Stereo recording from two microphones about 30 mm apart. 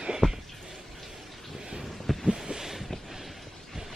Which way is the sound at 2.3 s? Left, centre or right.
Right.